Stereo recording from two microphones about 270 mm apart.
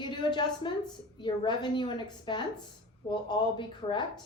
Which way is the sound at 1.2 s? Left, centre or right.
Centre.